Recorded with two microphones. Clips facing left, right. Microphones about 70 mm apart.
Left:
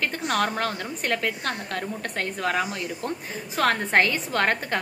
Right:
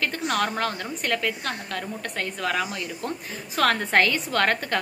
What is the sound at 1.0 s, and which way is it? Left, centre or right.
A woman's voice, left.